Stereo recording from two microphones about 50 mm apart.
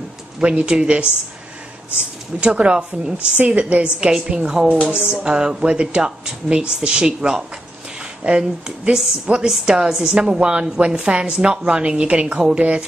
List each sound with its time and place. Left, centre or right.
0.4 s speech: right
2.4 s a woman's voice: right